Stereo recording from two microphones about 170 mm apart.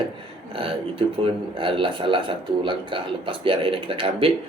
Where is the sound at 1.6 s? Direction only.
30° right (ahead or behind).